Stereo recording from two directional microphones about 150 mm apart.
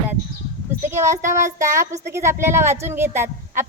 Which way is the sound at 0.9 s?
20° right (ahead or behind).